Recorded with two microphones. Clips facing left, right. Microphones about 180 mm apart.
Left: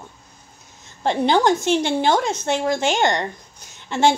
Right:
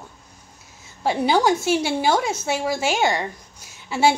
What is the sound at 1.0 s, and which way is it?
A woman's voice, 5° right (ahead or behind).